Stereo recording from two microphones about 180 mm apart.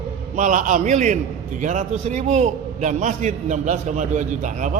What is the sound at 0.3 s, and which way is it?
A man's voice, 45° right (ahead or behind).